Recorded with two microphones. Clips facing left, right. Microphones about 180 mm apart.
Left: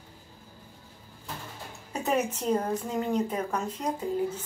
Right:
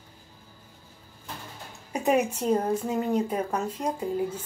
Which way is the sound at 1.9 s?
15° right (ahead or behind).